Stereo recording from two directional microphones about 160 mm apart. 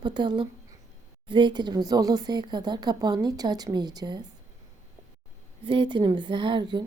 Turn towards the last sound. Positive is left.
turn(degrees=-30)  # may be behind; listen again after turning